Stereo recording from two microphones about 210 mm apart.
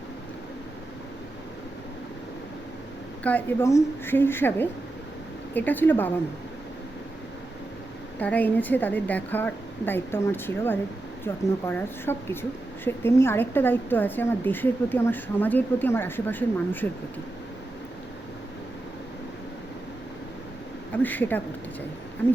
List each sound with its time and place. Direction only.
3.2 s a woman's voice: 10° left (ahead or behind)
8.2 s a woman's voice: 10° left (ahead or behind)
20.9 s a woman's voice: 10° left (ahead or behind)